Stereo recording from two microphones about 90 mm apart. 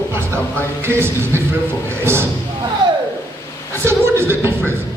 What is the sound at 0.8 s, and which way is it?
Speech, 25° right (ahead or behind).